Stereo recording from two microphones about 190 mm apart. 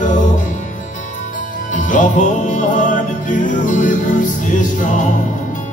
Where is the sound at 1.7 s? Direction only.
40° left (ahead or behind).